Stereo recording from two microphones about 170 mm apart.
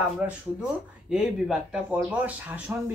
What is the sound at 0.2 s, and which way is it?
Speech, 10° right (ahead or behind).